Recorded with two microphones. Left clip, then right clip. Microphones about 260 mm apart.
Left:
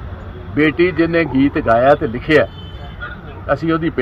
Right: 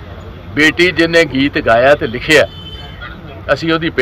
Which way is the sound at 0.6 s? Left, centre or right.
Centre.